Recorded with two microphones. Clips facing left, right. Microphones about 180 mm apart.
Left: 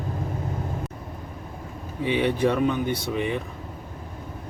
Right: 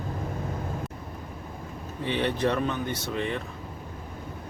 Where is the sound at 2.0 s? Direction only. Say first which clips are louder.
Left 4 dB; 10° left (ahead or behind).